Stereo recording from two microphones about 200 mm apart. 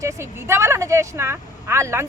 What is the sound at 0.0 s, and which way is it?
A woman's voice, 15° right (ahead or behind).